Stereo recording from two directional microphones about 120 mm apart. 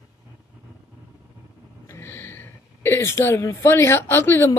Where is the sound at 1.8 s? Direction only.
20° left (ahead or behind).